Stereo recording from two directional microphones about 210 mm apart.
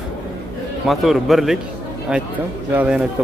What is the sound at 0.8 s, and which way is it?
Speech, centre (ahead or behind).